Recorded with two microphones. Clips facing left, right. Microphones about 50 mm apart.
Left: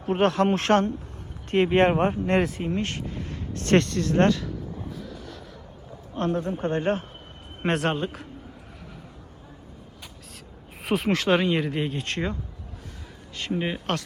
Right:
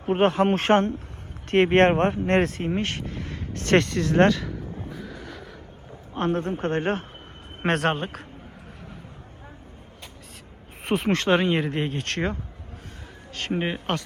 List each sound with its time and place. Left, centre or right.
0.0 s speech: centre
1.5 s speech: right
6.1 s speech: right
10.8 s speech: centre
11.4 s speech: right
13.3 s a man's voice: right
13.6 s a man's voice: centre